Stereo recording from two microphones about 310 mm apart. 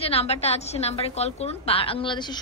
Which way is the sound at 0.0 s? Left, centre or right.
Centre.